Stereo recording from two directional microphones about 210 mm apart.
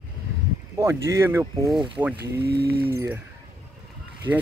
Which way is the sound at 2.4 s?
50° right (ahead or behind).